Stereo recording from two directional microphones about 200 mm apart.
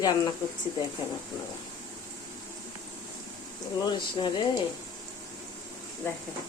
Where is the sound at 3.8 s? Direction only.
20° left (ahead or behind).